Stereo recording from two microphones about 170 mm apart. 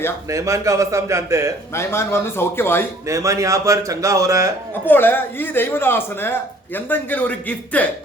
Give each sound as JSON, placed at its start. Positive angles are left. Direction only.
{"t": 0.3, "sound": "a man's voice", "side_deg": -20}
{"t": 1.7, "sound": "speech", "side_deg": 15}
{"t": 3.1, "sound": "a man's voice", "side_deg": -20}
{"t": 4.9, "sound": "speech", "side_deg": 10}